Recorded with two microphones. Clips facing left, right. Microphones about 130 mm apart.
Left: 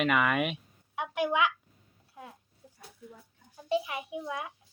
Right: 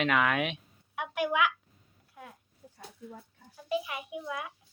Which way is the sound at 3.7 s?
30° left (ahead or behind).